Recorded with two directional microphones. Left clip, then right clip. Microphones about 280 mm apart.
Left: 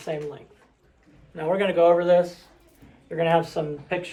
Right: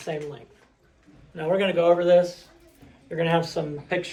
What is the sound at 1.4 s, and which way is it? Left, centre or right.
Speech, centre.